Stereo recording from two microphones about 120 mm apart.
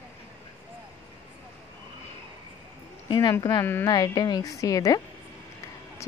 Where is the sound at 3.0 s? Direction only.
40° left (ahead or behind).